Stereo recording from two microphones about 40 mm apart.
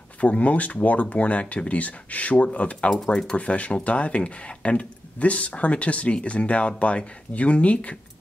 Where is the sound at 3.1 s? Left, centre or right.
Centre.